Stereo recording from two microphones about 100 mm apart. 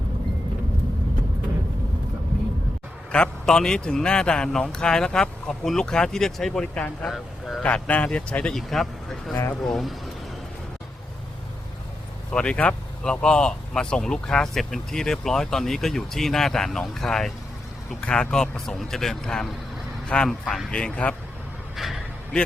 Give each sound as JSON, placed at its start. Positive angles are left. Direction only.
{"t": 3.1, "sound": "a man's voice", "side_deg": 10}
{"t": 7.6, "sound": "a man's voice", "side_deg": 15}
{"t": 9.3, "sound": "speech", "side_deg": 25}
{"t": 9.6, "sound": "speech", "side_deg": 0}
{"t": 12.3, "sound": "a man's voice", "side_deg": 10}
{"t": 21.8, "sound": "a sound", "side_deg": 0}